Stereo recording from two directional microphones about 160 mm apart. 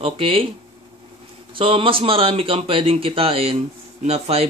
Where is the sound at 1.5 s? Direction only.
35° right (ahead or behind).